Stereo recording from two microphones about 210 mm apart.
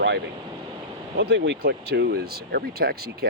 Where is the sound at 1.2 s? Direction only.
55° right (ahead or behind).